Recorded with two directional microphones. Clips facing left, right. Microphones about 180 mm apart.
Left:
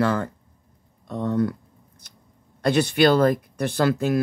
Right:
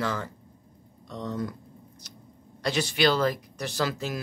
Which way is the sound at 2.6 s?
55° left (ahead or behind).